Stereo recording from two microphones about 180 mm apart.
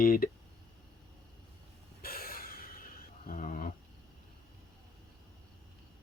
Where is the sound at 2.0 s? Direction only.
55° left (ahead or behind).